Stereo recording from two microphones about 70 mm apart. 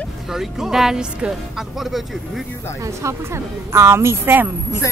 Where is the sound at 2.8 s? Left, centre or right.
Right.